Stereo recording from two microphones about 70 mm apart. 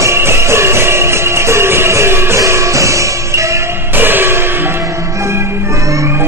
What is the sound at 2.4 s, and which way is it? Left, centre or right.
Music, right.